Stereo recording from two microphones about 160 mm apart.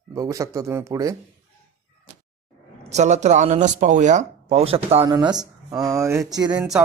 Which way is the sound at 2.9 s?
45° right (ahead or behind).